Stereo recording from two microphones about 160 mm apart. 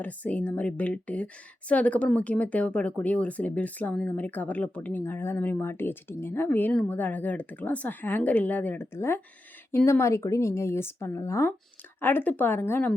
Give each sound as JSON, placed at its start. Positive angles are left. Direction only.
{"t": 0.0, "sound": "speech", "side_deg": 10}